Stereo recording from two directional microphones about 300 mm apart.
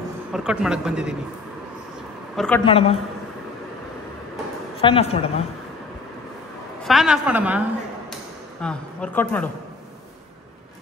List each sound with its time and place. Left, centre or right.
0.3 s a woman's voice: centre
2.3 s a woman's voice: centre
2.6 s a man's voice: centre
4.8 s a man's voice: centre
6.8 s a woman's voice: centre